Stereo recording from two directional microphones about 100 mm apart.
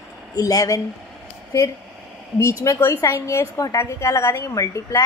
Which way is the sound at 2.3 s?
30° left (ahead or behind).